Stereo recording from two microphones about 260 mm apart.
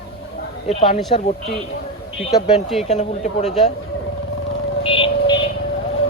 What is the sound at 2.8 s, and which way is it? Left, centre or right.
Speech, left.